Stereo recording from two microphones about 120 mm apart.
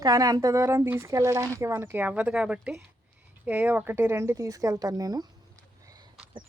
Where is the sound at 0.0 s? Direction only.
30° right (ahead or behind).